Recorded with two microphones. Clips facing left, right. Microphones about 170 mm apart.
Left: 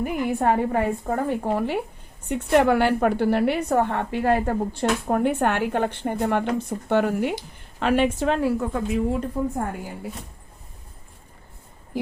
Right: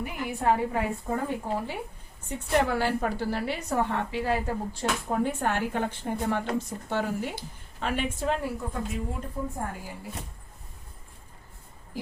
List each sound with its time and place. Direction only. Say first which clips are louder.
0.0 s a woman's voice: left 6 dB; 55° left (ahead or behind)
7.8 s a woman's voice: left 9 dB; 80° left